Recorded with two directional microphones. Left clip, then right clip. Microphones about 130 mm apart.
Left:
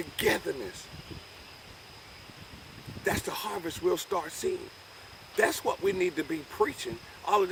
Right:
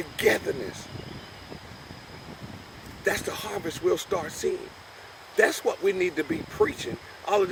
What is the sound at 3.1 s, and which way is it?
Speech, 25° left (ahead or behind).